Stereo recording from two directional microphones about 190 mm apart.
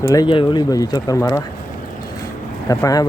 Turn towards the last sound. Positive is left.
turn(degrees=20)  # may be behind; listen again after turning